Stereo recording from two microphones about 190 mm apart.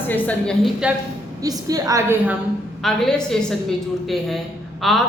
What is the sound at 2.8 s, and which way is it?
A woman's voice, 5° left (ahead or behind).